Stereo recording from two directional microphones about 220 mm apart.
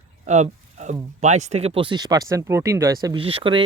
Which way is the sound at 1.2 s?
30° right (ahead or behind).